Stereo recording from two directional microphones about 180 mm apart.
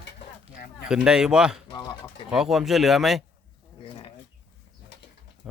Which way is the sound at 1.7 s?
20° left (ahead or behind).